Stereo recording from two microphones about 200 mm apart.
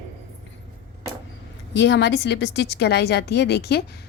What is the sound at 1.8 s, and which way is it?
A woman's voice, 60° left (ahead or behind).